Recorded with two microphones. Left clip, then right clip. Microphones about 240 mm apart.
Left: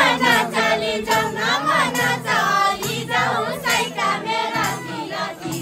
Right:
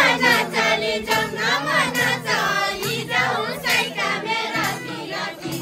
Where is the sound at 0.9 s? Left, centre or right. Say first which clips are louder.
Left 2 dB; left.